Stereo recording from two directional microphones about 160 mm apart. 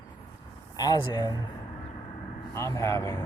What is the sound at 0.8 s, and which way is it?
Speech, 25° left (ahead or behind).